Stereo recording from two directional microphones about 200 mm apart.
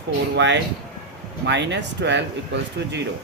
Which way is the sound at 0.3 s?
60° right (ahead or behind).